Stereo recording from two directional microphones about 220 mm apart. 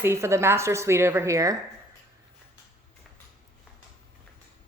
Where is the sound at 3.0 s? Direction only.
Centre (ahead or behind).